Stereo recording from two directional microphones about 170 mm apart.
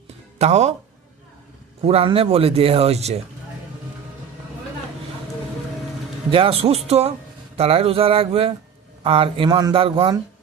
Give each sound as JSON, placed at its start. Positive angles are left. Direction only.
{"t": 0.3, "sound": "speech", "side_deg": -40}
{"t": 1.8, "sound": "speech", "side_deg": -35}
{"t": 6.3, "sound": "speech", "side_deg": -35}